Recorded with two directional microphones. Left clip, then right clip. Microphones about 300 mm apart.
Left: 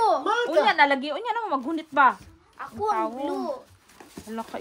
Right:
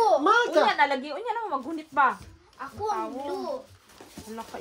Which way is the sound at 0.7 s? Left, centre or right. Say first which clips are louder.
Left 4 dB; left.